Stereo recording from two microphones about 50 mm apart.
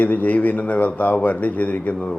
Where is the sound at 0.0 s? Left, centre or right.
Left.